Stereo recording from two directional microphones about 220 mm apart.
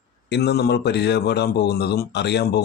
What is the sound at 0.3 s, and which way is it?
Speech, 50° left (ahead or behind).